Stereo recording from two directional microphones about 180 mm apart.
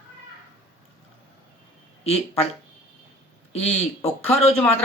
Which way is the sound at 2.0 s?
35° left (ahead or behind).